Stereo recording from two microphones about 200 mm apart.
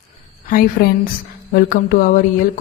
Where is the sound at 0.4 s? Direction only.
45° left (ahead or behind).